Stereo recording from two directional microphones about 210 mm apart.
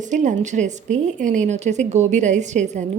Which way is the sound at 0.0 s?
35° right (ahead or behind).